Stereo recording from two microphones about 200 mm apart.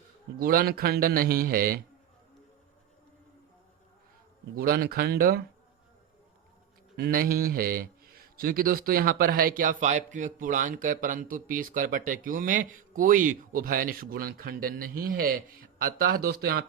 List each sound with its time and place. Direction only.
0.3 s a man's voice: 45° right (ahead or behind)
4.5 s a man's voice: 45° right (ahead or behind)
6.9 s a man's voice: 50° right (ahead or behind)